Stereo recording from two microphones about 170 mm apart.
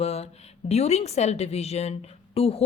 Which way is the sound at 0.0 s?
35° left (ahead or behind).